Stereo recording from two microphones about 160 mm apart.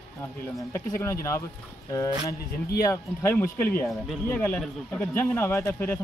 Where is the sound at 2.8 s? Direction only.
15° left (ahead or behind).